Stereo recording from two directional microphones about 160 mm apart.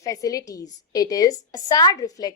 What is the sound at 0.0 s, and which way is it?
A woman's voice, 20° left (ahead or behind).